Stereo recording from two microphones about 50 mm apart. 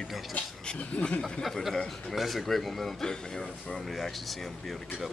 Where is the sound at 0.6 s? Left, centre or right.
Centre.